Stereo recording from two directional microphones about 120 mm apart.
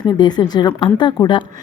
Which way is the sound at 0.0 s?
40° left (ahead or behind).